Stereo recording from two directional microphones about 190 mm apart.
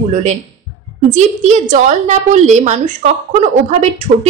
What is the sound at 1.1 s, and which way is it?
Speech, 40° right (ahead or behind).